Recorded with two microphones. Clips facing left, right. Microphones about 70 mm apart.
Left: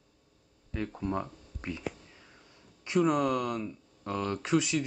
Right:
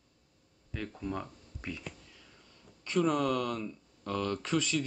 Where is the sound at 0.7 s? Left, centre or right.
Centre.